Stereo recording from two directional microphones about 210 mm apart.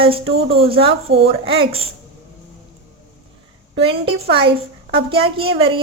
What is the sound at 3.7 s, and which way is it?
Speech, 25° right (ahead or behind).